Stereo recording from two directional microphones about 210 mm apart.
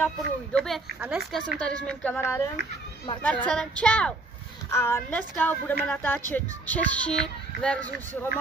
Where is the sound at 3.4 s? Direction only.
5° left (ahead or behind).